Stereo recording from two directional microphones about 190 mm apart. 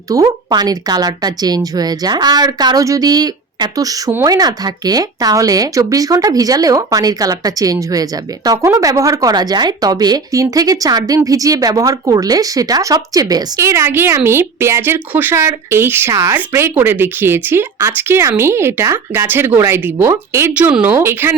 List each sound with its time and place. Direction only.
0.1 s a woman's voice: 20° right (ahead or behind)